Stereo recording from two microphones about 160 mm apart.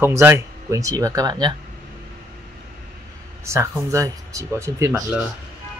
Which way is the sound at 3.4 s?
20° right (ahead or behind).